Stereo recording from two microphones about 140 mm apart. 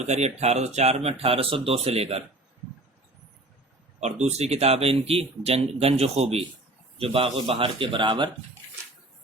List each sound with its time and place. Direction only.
0.0 s speech: 50° right (ahead or behind)
4.0 s a man's voice: 50° right (ahead or behind); by 8.3 s 35° right (ahead or behind)